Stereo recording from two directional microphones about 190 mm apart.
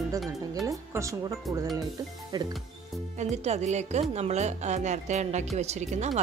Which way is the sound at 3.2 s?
35° right (ahead or behind).